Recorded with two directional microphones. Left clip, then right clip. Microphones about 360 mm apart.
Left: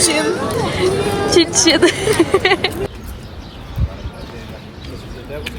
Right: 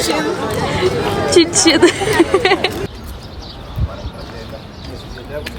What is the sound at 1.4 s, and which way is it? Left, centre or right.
A woman's voice, centre.